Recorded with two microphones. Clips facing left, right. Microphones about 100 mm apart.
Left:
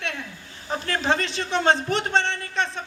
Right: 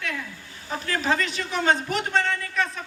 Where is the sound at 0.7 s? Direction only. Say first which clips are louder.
Left 1 dB; 30° left (ahead or behind).